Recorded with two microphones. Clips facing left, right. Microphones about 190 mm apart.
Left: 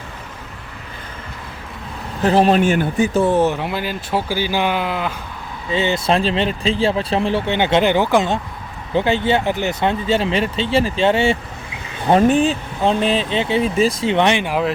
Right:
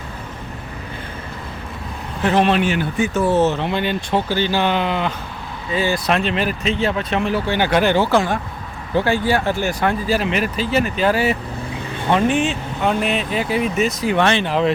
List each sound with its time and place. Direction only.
2.2 s speech: 35° left (ahead or behind)
3.2 s speech: 15° left (ahead or behind)
5.7 s speech: 25° left (ahead or behind)
12.1 s speech: 35° left (ahead or behind); by 14.7 s 10° left (ahead or behind)